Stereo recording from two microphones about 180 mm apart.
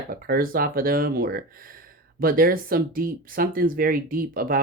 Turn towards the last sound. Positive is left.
turn(degrees=-50)  # may be behind; listen again after turning